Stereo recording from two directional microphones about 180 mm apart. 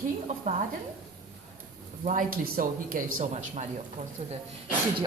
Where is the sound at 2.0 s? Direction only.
50° right (ahead or behind).